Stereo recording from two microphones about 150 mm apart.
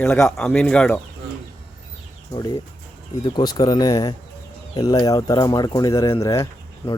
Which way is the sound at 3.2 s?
30° left (ahead or behind).